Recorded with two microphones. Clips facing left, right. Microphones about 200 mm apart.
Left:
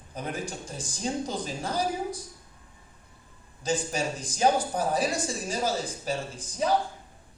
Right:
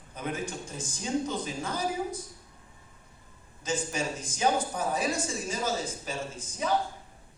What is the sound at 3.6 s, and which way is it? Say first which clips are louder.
A man's voice: left 3 dB; 35° left (ahead or behind).